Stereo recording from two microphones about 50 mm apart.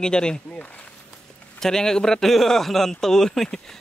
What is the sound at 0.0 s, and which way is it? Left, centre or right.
Speech, centre.